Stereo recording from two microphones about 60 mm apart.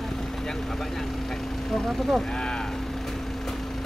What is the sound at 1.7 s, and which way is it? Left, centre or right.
Speech, centre.